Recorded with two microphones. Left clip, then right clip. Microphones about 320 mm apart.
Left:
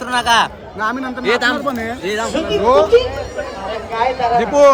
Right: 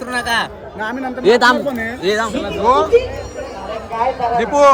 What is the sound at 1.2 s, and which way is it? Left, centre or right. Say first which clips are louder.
A man's voice: right 4 dB; centre.